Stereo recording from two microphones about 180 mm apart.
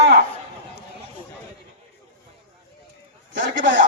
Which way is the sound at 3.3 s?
90° right.